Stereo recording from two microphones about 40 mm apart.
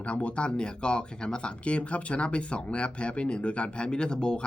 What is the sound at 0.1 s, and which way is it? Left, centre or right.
Speech, left.